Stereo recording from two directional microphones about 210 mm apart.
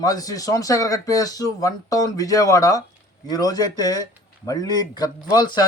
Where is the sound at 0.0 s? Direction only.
15° left (ahead or behind).